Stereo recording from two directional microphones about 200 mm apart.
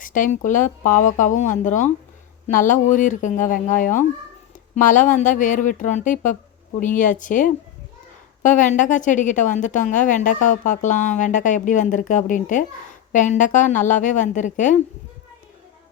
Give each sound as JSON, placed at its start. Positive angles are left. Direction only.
{"t": 0.0, "sound": "a woman's voice", "side_deg": 40}